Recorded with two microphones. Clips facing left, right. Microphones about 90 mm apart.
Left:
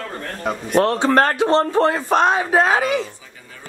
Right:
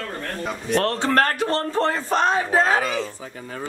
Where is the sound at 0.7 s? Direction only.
15° left (ahead or behind).